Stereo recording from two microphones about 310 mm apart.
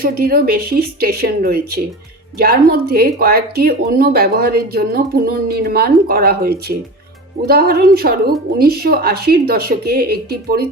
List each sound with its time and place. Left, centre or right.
0.0 s speech: right